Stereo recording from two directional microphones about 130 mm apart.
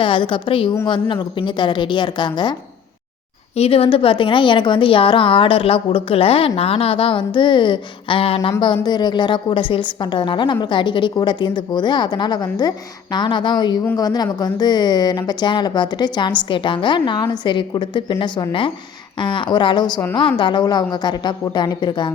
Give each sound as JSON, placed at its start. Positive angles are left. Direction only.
{"t": 0.0, "sound": "a woman's voice", "side_deg": 40}
{"t": 3.5, "sound": "a woman's voice", "side_deg": 50}